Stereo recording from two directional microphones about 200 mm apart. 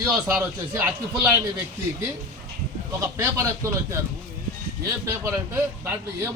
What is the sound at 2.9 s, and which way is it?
A man's voice, 15° right (ahead or behind).